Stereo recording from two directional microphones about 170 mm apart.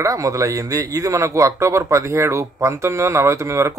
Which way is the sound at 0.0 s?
20° right (ahead or behind).